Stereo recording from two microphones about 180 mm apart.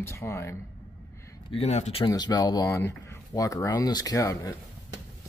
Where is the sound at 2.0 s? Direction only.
20° left (ahead or behind).